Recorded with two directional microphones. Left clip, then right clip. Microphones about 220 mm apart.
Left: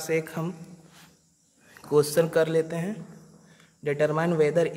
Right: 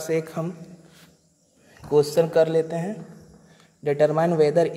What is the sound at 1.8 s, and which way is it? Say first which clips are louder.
A man's voice: right 3 dB; 10° left (ahead or behind).